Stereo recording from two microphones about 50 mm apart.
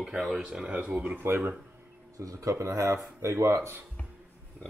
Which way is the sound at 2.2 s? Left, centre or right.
Right.